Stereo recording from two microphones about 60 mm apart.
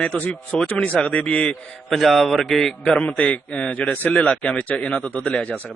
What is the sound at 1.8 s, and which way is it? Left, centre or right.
A man's voice, centre.